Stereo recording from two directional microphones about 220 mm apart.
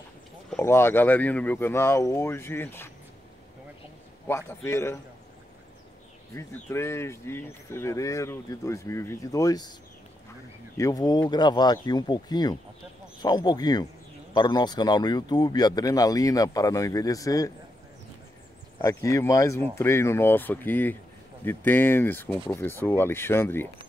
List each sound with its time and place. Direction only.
0.5 s speech: 10° left (ahead or behind)
4.3 s speech: 10° left (ahead or behind)
6.3 s speech: 10° left (ahead or behind)
10.8 s speech: 15° left (ahead or behind)
18.8 s speech: 15° left (ahead or behind)